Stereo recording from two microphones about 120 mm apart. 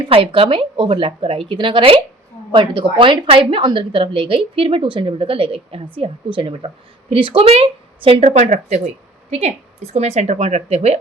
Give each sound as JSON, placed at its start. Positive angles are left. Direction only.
{"t": 0.0, "sound": "a woman's voice", "side_deg": -50}
{"t": 9.3, "sound": "a woman's voice", "side_deg": -60}